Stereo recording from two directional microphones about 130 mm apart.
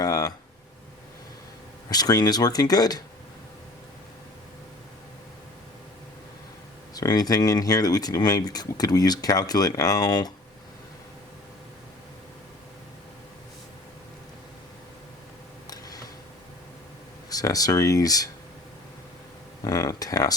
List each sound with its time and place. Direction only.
0.0 s a sound: 25° left (ahead or behind)
1.9 s speech: 30° left (ahead or behind)
6.9 s speech: 30° left (ahead or behind)
15.7 s tick: 30° left (ahead or behind)
17.2 s speech: 30° left (ahead or behind)
19.6 s speech: 25° left (ahead or behind)